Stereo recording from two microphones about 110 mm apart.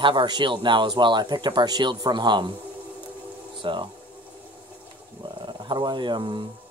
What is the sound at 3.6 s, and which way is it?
Speech, 50° right (ahead or behind).